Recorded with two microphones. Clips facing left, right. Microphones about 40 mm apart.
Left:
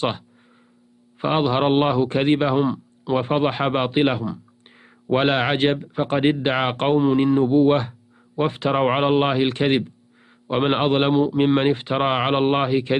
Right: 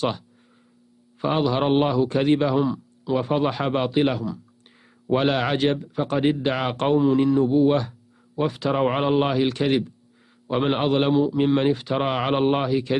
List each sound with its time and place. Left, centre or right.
1.2 s a man's voice: left